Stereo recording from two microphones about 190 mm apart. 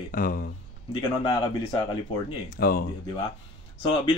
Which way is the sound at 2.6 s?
55° left (ahead or behind).